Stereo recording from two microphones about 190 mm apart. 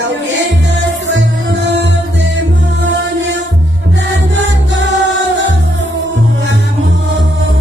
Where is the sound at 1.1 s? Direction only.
70° right (ahead or behind).